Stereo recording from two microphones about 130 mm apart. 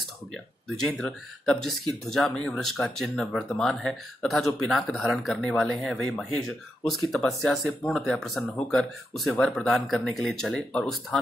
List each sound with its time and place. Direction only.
0.8 s speech: 5° left (ahead or behind)